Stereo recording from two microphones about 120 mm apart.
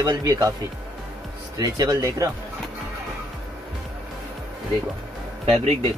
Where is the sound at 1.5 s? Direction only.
35° right (ahead or behind).